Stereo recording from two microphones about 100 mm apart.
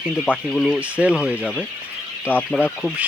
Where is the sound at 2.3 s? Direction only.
20° left (ahead or behind).